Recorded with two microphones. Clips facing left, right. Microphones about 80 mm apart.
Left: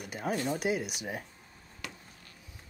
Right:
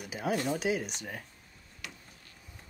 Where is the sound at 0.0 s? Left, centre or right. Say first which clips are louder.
Right 1 dB; centre.